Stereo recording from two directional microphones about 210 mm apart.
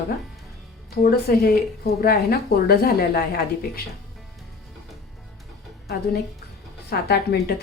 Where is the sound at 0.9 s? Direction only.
45° left (ahead or behind).